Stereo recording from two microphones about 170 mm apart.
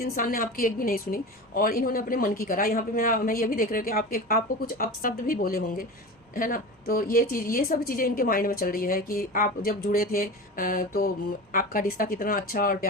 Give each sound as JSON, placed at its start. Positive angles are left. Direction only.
{"t": 0.0, "sound": "a woman's voice", "side_deg": 55}